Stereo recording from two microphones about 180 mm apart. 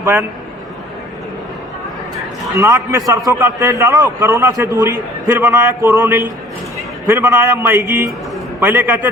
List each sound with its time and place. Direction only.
0.0 s a man's voice: 15° right (ahead or behind)
2.6 s a man's voice: 15° right (ahead or behind)